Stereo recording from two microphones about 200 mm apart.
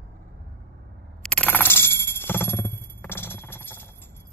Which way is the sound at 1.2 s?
5° left (ahead or behind).